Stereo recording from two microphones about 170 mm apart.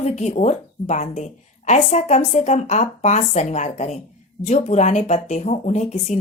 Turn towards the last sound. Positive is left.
turn(degrees=40)  # may be behind; listen again after turning